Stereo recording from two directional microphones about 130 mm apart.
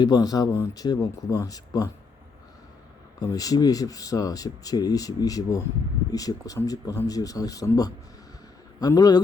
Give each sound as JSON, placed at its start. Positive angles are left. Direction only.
{"t": 0.0, "sound": "speech", "side_deg": 30}
{"t": 3.2, "sound": "speech", "side_deg": 30}